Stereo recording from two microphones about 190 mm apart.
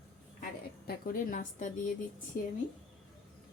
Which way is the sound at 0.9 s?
50° left (ahead or behind).